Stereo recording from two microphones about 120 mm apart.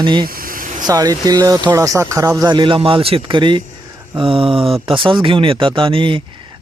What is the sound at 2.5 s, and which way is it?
Speech, 40° right (ahead or behind).